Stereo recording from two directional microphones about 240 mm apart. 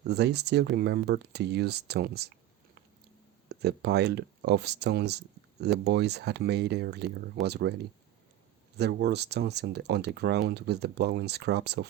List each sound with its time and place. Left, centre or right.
0.0 s speech: right
3.5 s speech: right